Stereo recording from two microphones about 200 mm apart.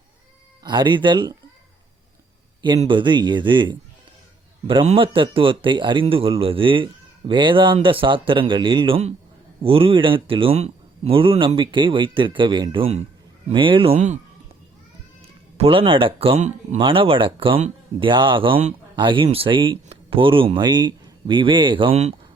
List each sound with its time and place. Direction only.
0.6 s speech: 20° right (ahead or behind)
2.6 s speech: 20° right (ahead or behind)
15.5 s speech: 25° right (ahead or behind)